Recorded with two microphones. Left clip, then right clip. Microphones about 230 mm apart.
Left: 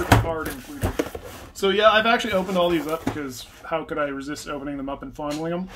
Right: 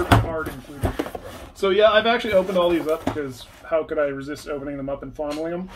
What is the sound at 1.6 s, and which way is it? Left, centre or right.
Speech, left.